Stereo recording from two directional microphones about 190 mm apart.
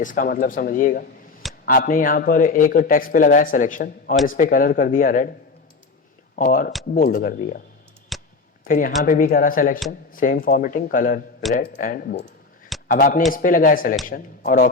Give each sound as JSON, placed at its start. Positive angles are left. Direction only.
{"t": 0.0, "sound": "a man's voice", "side_deg": 45}
{"t": 6.3, "sound": "a man's voice", "side_deg": 45}
{"t": 8.1, "sound": "a sound", "side_deg": 0}
{"t": 8.6, "sound": "a man's voice", "side_deg": 45}